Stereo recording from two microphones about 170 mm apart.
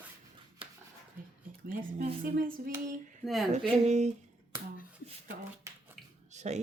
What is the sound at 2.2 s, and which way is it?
Speech, 55° right (ahead or behind).